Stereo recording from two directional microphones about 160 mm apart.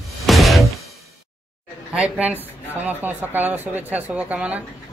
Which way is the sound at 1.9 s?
10° right (ahead or behind).